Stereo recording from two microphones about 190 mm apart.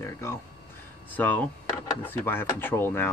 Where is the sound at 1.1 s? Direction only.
10° left (ahead or behind).